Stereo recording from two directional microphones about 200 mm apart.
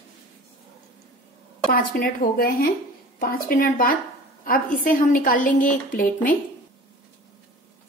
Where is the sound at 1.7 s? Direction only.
45° left (ahead or behind).